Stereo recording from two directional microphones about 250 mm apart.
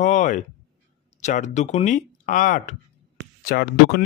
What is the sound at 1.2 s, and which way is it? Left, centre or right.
Speech, left.